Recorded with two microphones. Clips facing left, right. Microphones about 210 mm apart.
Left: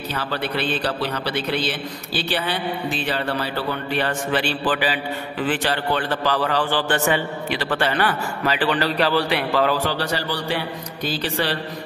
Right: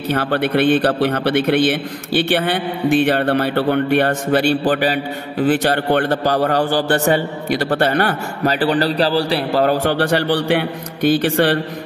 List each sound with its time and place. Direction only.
0.1 s a man's voice: 55° right (ahead or behind)
4.3 s a man's voice: 45° right (ahead or behind)
5.9 s a man's voice: 55° right (ahead or behind)
10.0 s a man's voice: 60° right (ahead or behind)